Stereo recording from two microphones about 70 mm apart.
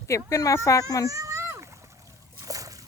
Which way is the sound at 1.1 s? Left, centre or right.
Right.